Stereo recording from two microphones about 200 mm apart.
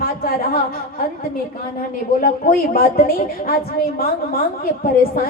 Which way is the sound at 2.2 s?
45° left (ahead or behind).